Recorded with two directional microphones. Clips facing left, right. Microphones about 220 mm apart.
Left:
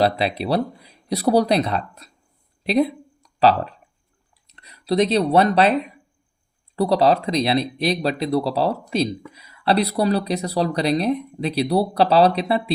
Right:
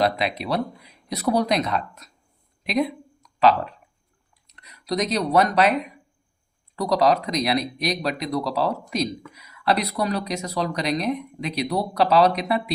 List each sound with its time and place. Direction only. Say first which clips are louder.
0.0 s speech: left 3 dB; 30° left (ahead or behind)